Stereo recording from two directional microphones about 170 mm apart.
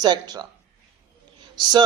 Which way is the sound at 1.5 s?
25° right (ahead or behind).